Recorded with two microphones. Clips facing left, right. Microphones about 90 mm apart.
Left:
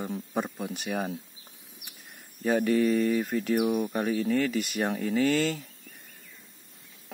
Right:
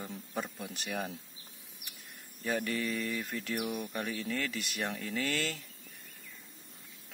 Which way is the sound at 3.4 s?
20° left (ahead or behind).